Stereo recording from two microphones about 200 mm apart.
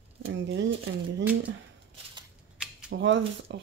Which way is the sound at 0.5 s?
70° right (ahead or behind).